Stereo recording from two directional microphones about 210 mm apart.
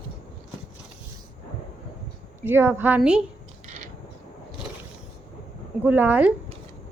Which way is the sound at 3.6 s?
30° right (ahead or behind).